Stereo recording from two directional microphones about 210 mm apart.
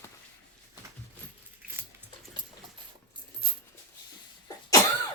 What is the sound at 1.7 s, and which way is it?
Dog, 10° right (ahead or behind).